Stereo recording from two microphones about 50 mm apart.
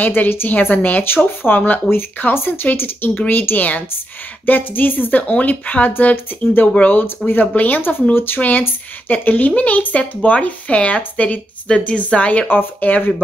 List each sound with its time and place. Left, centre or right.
0.0 s speech: left
5.2 s speech: left
8.4 s a woman's voice: left
12.4 s speech: left